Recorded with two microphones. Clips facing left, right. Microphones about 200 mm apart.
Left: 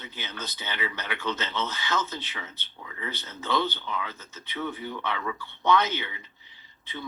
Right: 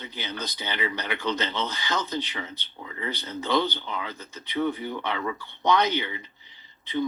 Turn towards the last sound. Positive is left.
turn(degrees=-15)  # may be behind; listen again after turning